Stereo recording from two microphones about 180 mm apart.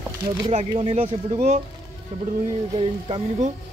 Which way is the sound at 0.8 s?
35° right (ahead or behind).